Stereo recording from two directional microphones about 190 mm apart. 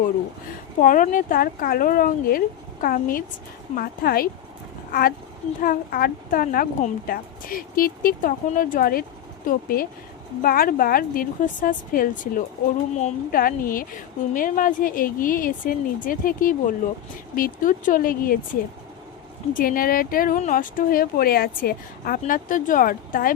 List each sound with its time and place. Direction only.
0.8 s a woman's voice: 45° left (ahead or behind)
19.5 s a woman's voice: 50° left (ahead or behind)